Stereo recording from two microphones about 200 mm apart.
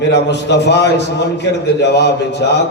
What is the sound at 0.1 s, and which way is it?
A man's voice, 60° left (ahead or behind).